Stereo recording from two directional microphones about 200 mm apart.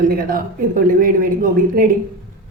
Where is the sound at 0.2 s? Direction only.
45° right (ahead or behind).